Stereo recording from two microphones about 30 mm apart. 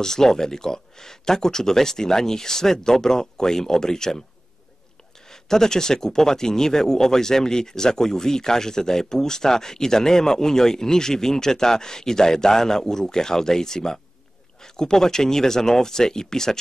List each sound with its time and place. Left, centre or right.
0.0 s speech: centre
5.3 s speech: centre